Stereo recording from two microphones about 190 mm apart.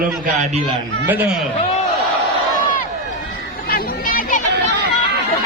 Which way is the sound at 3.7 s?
45° left (ahead or behind).